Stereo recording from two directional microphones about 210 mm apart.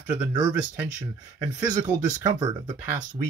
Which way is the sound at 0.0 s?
10° right (ahead or behind).